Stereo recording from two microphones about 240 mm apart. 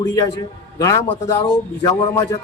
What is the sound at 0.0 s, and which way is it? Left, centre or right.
A man's voice, centre.